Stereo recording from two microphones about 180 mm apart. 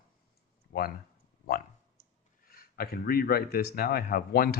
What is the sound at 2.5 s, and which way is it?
Speech, 55° left (ahead or behind).